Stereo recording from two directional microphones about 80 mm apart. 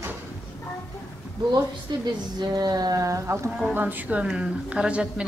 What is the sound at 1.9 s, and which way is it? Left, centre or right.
A woman's voice, right.